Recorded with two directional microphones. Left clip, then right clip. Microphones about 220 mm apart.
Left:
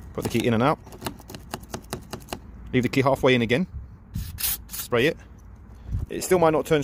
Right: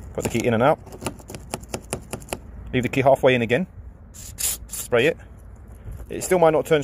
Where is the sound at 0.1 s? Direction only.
20° left (ahead or behind).